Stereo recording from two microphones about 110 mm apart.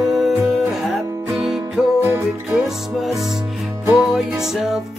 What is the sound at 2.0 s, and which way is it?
Music, 25° right (ahead or behind).